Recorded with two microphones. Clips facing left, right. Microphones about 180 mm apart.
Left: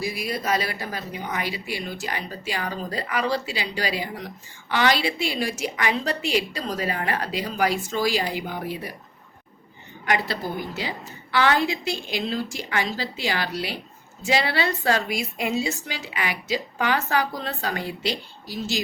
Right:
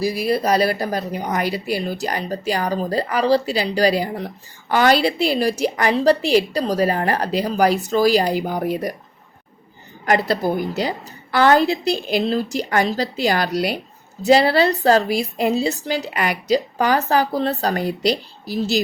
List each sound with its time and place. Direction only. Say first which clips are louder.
0.0 s speech: right 8 dB; 35° right (ahead or behind)
10.1 s speech: right 7 dB; 40° right (ahead or behind)